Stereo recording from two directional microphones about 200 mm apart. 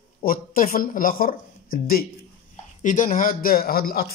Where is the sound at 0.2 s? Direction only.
45° left (ahead or behind).